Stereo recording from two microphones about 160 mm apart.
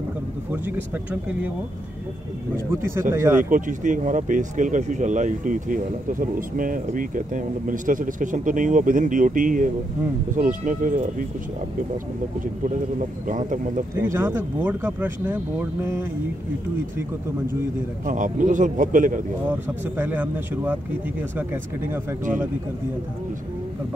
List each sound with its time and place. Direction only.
0.5 s speech: 10° right (ahead or behind)
2.5 s speech: 15° right (ahead or behind)
3.4 s speech: 55° right (ahead or behind)
13.3 s speech: 55° right (ahead or behind)
14.1 s speech: 15° right (ahead or behind)
18.0 s speech: 55° right (ahead or behind)
20.0 s speech: 10° right (ahead or behind)